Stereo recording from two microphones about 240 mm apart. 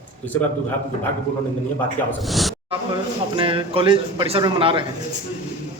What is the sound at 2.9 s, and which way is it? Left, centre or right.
A man's voice, centre.